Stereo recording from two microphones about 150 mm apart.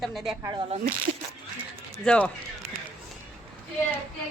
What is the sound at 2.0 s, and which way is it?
Speech, 5° left (ahead or behind).